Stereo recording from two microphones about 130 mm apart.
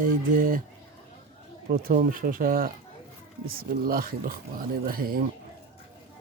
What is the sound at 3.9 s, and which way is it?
Speech, 90° right.